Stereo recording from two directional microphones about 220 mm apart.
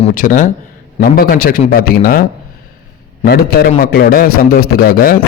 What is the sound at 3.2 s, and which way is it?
A man's voice, 45° left (ahead or behind).